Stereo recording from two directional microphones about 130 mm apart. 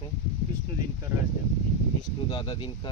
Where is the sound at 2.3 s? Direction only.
40° left (ahead or behind).